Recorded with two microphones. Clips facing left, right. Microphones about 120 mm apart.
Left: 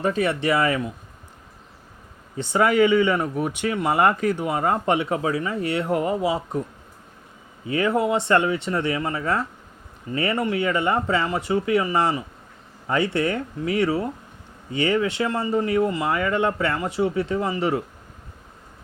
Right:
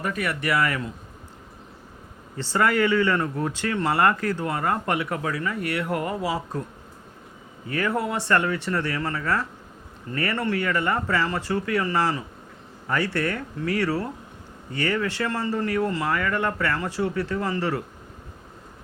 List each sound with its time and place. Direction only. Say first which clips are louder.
0.0 s speech: left 5 dB; 30° left (ahead or behind)
2.3 s speech: left 3 dB; 15° left (ahead or behind)
7.7 s speech: left 5 dB; 20° left (ahead or behind)